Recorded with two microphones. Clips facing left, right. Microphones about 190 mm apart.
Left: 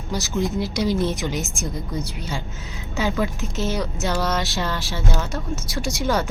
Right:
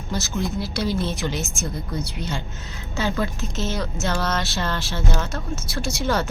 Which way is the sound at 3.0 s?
10° left (ahead or behind).